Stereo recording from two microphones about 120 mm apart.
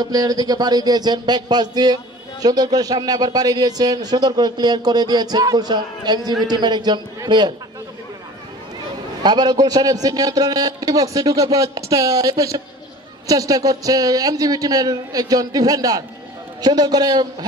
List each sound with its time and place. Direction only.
0.0 s a man's voice: 30° right (ahead or behind)
9.2 s a man's voice: 35° right (ahead or behind)